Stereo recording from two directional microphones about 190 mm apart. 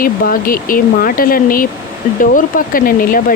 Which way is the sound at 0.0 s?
50° left (ahead or behind).